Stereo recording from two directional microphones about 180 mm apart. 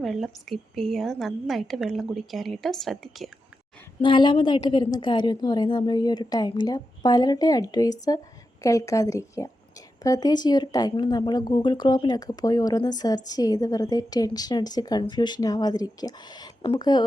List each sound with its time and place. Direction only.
0.0 s a woman's voice: centre (ahead or behind)
4.0 s a woman's voice: 25° left (ahead or behind)